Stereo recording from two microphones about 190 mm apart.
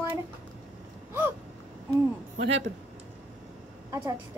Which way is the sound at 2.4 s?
35° right (ahead or behind).